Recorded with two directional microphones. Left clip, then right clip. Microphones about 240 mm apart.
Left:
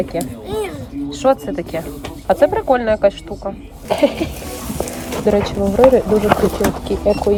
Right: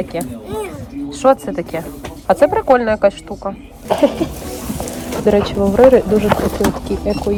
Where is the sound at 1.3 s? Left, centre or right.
Centre.